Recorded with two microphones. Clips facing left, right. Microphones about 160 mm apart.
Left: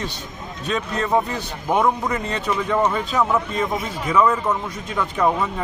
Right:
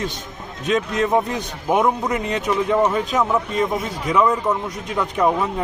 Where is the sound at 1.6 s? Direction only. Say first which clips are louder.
Right 1 dB; 15° right (ahead or behind).